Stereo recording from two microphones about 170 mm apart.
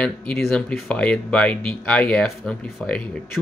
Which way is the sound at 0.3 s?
5° left (ahead or behind).